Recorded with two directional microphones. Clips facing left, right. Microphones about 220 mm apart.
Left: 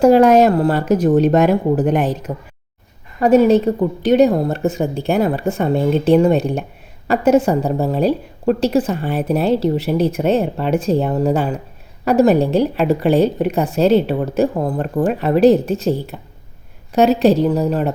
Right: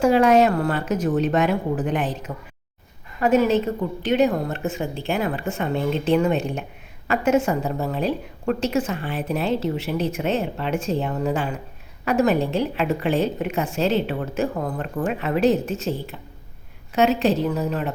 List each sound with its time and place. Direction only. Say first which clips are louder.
0.0 s a woman's voice: left 6 dB; 40° left (ahead or behind)